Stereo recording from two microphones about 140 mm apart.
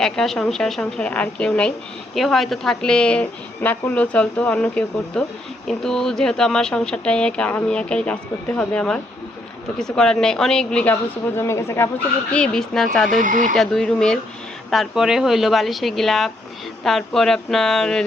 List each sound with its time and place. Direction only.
0.0 s a woman's voice: 5° left (ahead or behind)
11.3 s a woman's voice: 20° left (ahead or behind)
12.3 s a woman's voice: 5° left (ahead or behind)
13.1 s speech: 70° right (ahead or behind)
13.6 s a woman's voice: 5° left (ahead or behind)